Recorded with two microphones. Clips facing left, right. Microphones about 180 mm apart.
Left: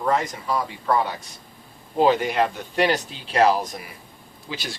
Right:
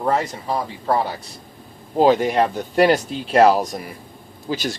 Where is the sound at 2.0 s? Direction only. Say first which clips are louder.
Right 4 dB; 40° right (ahead or behind).